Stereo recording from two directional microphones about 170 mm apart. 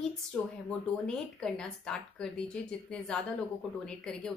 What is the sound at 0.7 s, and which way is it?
Speech, 5° left (ahead or behind).